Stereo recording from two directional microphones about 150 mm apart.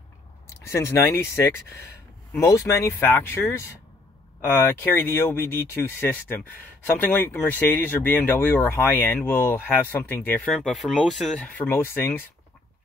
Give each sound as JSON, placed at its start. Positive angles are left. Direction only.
{"t": 0.5, "sound": "speech", "side_deg": 20}
{"t": 10.5, "sound": "speech", "side_deg": 0}